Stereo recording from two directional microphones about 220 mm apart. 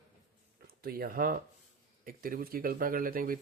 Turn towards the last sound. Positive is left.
turn(degrees=-40)  # may be behind; listen again after turning